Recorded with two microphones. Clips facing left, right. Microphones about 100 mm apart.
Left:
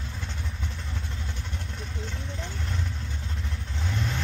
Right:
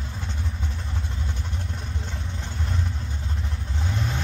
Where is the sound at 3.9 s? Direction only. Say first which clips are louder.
Right 1 dB; 30° right (ahead or behind).